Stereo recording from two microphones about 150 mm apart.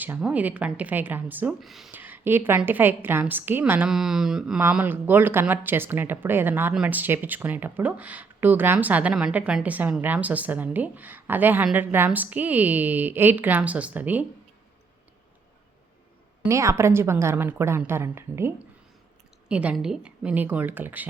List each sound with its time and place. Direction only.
0.0 s speech: 10° right (ahead or behind)
1.9 s speech: 10° right (ahead or behind)
16.5 s speech: 20° right (ahead or behind)